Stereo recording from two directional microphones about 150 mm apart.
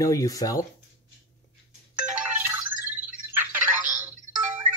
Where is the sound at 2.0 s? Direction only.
10° right (ahead or behind).